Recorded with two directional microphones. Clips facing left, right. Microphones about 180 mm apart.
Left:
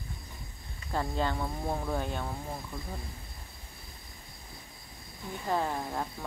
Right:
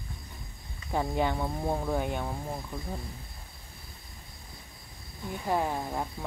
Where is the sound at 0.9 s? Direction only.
15° right (ahead or behind).